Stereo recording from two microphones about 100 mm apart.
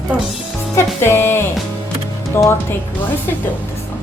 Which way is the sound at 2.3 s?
25° left (ahead or behind).